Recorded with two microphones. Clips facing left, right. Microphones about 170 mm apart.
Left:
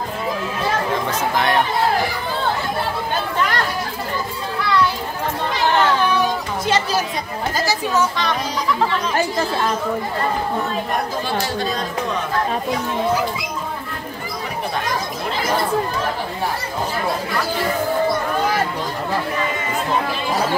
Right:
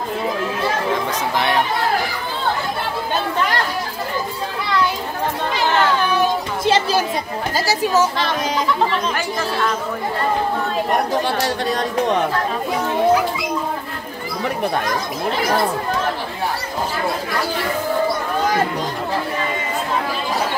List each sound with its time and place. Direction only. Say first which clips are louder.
6.6 s chatter: right 3 dB; 30° right (ahead or behind)
11.2 s speech: right 2 dB; 70° right (ahead or behind)